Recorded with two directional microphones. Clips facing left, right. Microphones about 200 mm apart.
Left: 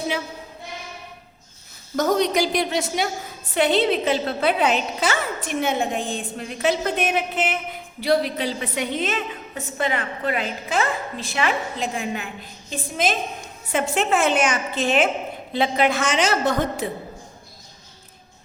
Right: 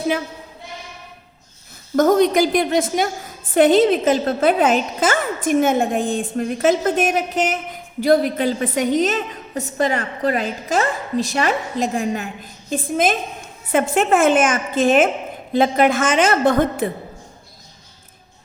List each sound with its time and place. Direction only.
2.0 s a woman's voice: 50° right (ahead or behind)